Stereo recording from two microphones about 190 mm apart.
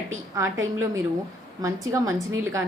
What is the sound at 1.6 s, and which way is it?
Speech, 15° right (ahead or behind).